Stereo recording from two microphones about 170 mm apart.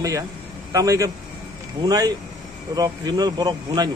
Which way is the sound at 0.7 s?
20° right (ahead or behind).